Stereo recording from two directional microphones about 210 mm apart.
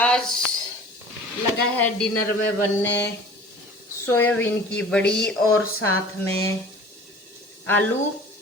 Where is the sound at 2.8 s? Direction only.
55° left (ahead or behind).